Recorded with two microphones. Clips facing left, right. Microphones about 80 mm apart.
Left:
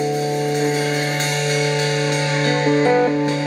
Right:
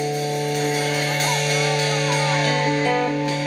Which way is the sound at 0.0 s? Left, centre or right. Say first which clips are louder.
Left 3 dB; left.